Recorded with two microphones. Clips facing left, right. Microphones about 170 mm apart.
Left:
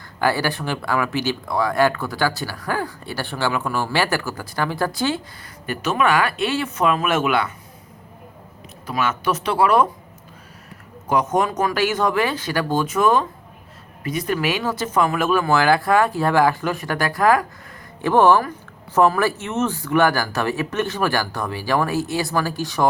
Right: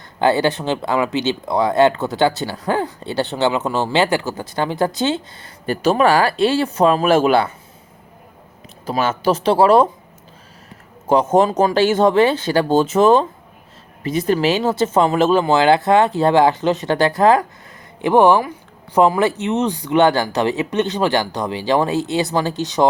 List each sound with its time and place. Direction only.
0.2 s speech: 20° right (ahead or behind)
8.9 s speech: 30° right (ahead or behind)
11.0 s speech: 25° right (ahead or behind)
18.0 s speech: 15° right (ahead or behind)